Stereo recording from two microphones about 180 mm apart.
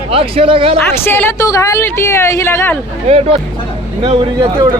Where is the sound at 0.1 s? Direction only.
30° right (ahead or behind).